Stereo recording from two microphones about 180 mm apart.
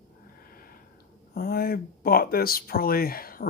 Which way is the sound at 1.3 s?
55° left (ahead or behind).